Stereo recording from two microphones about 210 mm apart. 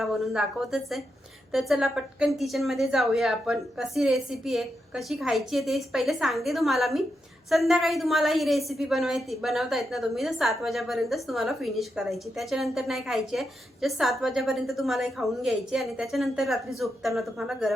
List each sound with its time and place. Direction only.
0.0 s a woman's voice: centre (ahead or behind)